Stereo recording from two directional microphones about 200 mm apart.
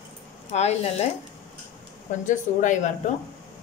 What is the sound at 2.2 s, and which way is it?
Speech, 40° left (ahead or behind).